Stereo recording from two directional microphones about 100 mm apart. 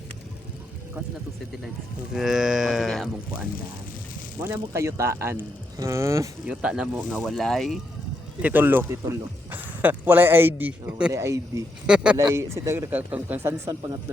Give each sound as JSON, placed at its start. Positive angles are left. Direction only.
{"t": 2.1, "sound": "livestock", "side_deg": -5}
{"t": 4.4, "sound": "speech", "side_deg": -20}
{"t": 6.5, "sound": "speech", "side_deg": -10}
{"t": 7.2, "sound": "livestock", "side_deg": 5}
{"t": 8.4, "sound": "speech", "side_deg": -15}
{"t": 11.1, "sound": "speech", "side_deg": -30}
{"t": 11.9, "sound": "speech", "side_deg": -10}
{"t": 12.1, "sound": "speech", "side_deg": -30}
{"t": 12.9, "sound": "speech", "side_deg": -15}